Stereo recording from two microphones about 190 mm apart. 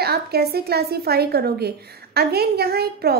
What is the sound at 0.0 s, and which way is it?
A woman's voice, 55° right (ahead or behind).